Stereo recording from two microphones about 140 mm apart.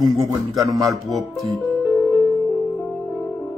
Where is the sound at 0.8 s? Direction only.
Centre (ahead or behind).